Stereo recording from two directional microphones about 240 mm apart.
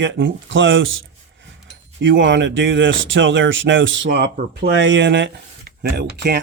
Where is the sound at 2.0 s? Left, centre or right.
Right.